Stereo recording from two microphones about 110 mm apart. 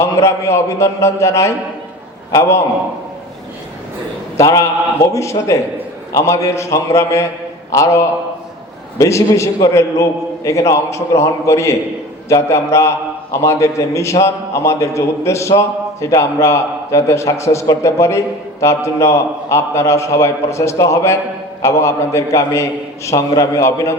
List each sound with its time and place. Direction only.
0.2 s a man's voice: 25° left (ahead or behind)
4.4 s a man's voice: 30° left (ahead or behind)